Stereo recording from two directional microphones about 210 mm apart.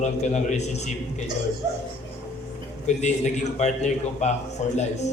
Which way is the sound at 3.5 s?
35° left (ahead or behind).